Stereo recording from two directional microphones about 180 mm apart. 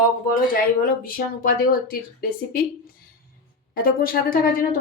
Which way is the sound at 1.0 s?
55° left (ahead or behind).